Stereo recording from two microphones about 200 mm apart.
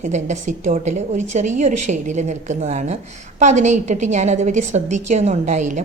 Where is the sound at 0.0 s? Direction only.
35° right (ahead or behind).